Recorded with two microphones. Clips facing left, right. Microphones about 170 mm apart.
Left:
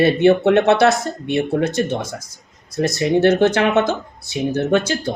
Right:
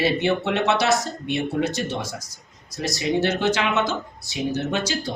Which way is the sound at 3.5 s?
55° left (ahead or behind).